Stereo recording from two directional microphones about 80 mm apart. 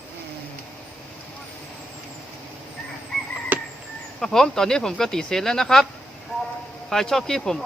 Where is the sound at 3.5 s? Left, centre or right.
Right.